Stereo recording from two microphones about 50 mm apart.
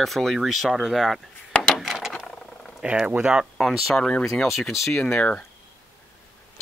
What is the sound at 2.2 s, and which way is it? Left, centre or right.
Vehicle, centre.